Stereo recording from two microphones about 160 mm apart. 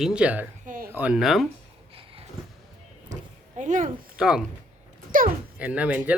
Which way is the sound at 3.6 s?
50° right (ahead or behind).